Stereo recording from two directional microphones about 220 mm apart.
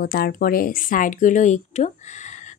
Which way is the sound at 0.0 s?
40° left (ahead or behind).